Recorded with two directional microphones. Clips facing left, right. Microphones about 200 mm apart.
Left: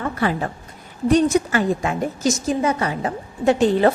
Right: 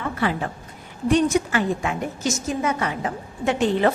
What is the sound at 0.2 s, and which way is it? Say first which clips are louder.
A woman's voice: left 2 dB; 40° left (ahead or behind).